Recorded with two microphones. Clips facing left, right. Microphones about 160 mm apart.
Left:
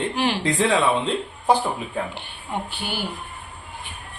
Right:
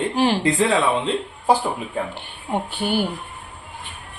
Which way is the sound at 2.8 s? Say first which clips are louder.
Right 8 dB; 50° right (ahead or behind).